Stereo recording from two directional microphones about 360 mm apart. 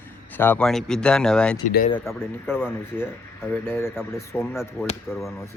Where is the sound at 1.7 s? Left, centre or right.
Left.